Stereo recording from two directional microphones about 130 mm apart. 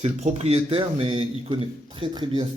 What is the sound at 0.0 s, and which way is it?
Speech, 60° right (ahead or behind).